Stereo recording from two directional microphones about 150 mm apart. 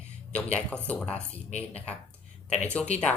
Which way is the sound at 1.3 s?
45° left (ahead or behind).